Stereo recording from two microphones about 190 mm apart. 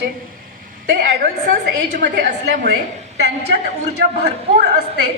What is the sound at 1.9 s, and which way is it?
Speech, 65° right (ahead or behind).